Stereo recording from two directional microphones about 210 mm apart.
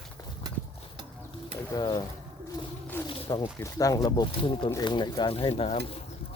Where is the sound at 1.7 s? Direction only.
20° left (ahead or behind).